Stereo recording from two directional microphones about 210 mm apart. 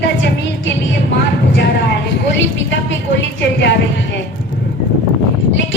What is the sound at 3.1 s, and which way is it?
Speech, 55° left (ahead or behind).